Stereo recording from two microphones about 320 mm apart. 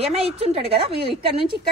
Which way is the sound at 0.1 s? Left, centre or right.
Centre.